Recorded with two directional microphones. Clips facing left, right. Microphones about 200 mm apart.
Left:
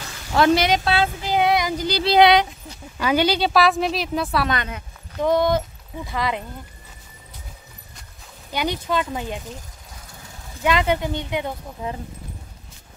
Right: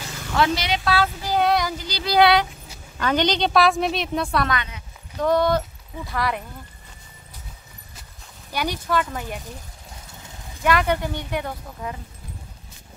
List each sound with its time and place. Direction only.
0.4 s speech: 45° left (ahead or behind)
0.8 s child singing: 25° left (ahead or behind)
1.8 s speech: 50° left (ahead or behind)
2.0 s child singing: 20° left (ahead or behind)
3.0 s a woman's voice: 10° left (ahead or behind)
5.2 s speech: 15° left (ahead or behind)
8.5 s child singing: 20° left (ahead or behind)
10.6 s speech: 15° left (ahead or behind)